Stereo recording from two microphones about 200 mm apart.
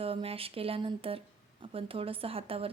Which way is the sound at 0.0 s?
30° right (ahead or behind).